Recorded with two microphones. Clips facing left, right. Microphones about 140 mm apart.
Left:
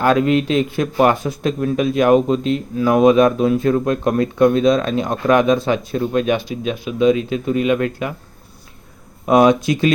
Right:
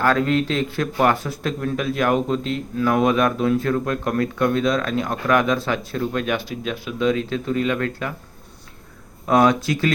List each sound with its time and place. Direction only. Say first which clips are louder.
0.0 s speech: left 4 dB; 15° left (ahead or behind)
9.2 s speech: left 4 dB; 15° left (ahead or behind)